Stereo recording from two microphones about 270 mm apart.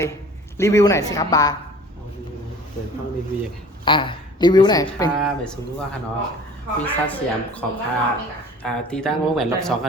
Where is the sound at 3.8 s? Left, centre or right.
Centre.